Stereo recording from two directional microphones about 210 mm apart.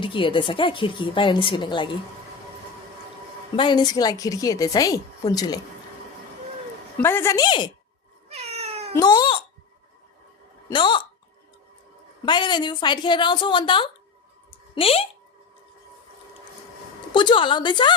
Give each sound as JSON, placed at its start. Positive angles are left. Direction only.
{"t": 0.0, "sound": "a woman's voice", "side_deg": 25}
{"t": 3.5, "sound": "a woman's voice", "side_deg": 25}
{"t": 7.0, "sound": "a woman's voice", "side_deg": 10}
{"t": 8.3, "sound": "cat", "side_deg": -30}
{"t": 9.0, "sound": "a woman's voice", "side_deg": 20}
{"t": 10.7, "sound": "a woman's voice", "side_deg": 20}
{"t": 12.2, "sound": "a woman's voice", "side_deg": 20}
{"t": 17.2, "sound": "a woman's voice", "side_deg": 25}